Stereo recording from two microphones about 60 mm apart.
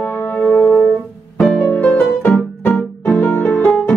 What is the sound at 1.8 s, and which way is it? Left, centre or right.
Music, centre.